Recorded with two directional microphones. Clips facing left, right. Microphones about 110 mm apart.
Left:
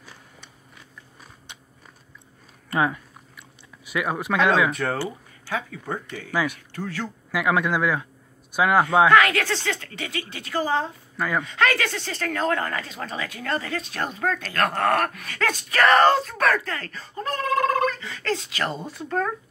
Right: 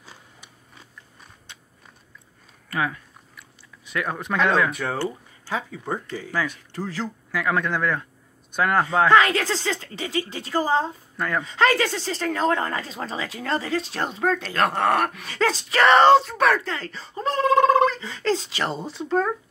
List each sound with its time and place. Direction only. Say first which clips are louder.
0.0 s a sound: left 1 dB; 15° right (ahead or behind)
2.7 s speech: left 3 dB; 25° left (ahead or behind)
3.8 s speech: left 2 dB; 10° left (ahead or behind)
6.3 s speech: left 3 dB; 10° left (ahead or behind)
9.1 s a woman's voice: even; 30° right (ahead or behind)
11.1 s speech: left 1 dB; 5° left (ahead or behind)
11.4 s speech: right 6 dB; 30° right (ahead or behind)